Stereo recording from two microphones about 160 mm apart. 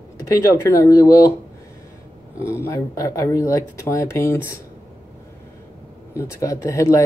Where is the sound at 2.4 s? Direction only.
15° left (ahead or behind).